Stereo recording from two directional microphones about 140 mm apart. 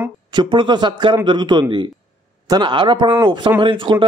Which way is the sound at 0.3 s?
35° right (ahead or behind).